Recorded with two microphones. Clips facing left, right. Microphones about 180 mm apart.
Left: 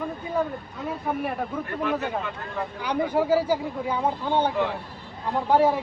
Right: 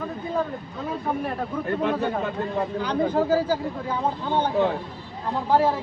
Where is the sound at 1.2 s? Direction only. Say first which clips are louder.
Even; 10° left (ahead or behind).